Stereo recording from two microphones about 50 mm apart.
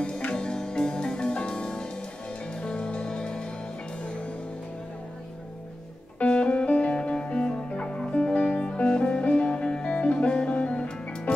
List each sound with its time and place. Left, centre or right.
0.2 s music: centre
6.1 s music: left